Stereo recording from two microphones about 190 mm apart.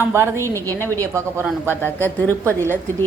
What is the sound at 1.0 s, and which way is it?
Speech, 15° right (ahead or behind).